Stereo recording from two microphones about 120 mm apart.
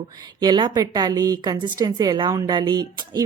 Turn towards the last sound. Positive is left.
turn(degrees=-35)  # may be behind; listen again after turning